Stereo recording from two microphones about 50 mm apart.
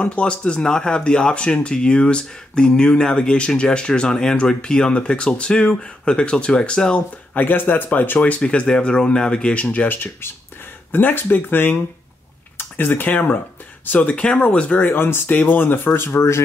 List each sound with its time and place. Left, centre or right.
0.0 s speech: left
7.3 s speech: left
8.4 s speech: centre
9.8 s speech: left
12.5 s a sound: left
13.1 s speech: left
13.8 s speech: left
15.0 s speech: left